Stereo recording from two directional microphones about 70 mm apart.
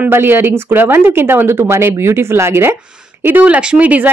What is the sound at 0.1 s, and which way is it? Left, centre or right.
Speech, right.